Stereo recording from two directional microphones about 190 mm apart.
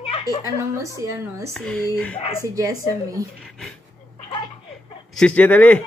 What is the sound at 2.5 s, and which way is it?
Speech, 20° right (ahead or behind).